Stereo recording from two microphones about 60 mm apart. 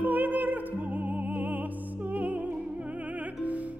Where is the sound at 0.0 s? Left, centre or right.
Right.